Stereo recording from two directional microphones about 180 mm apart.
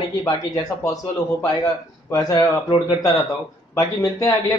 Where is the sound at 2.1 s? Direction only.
20° left (ahead or behind).